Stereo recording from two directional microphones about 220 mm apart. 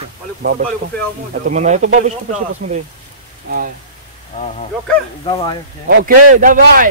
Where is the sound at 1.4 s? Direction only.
35° right (ahead or behind).